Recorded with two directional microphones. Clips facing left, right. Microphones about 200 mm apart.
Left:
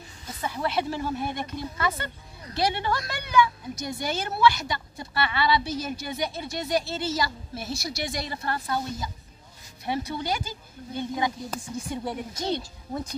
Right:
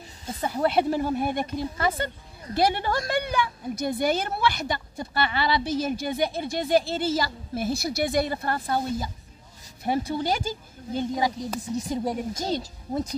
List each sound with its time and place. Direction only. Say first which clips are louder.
0.4 s a woman's voice: right 5 dB; 35° right (ahead or behind)
2.5 s a woman's voice: right 3 dB; 50° right (ahead or behind)
11.0 s speech: right 2 dB; 35° right (ahead or behind)